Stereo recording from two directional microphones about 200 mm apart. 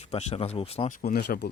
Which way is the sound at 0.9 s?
45° left (ahead or behind).